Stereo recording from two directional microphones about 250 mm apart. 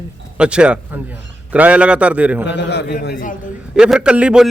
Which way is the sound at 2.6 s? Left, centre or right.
Left.